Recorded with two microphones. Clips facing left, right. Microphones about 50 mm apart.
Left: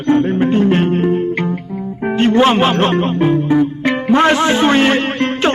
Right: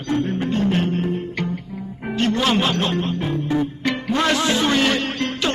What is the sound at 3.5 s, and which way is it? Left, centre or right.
Music, left.